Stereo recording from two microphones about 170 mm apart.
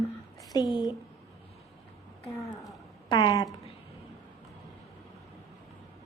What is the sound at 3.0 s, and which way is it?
Speech, 25° left (ahead or behind).